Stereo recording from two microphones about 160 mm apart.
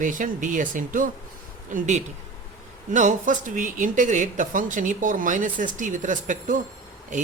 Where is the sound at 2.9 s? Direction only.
50° right (ahead or behind).